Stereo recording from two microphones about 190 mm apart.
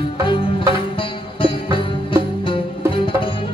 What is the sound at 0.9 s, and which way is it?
Music, 25° left (ahead or behind).